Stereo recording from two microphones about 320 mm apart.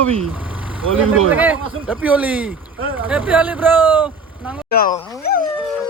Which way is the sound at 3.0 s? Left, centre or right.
Centre.